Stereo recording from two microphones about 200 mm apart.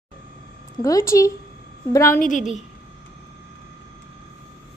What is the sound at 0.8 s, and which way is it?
A woman's voice, 15° left (ahead or behind).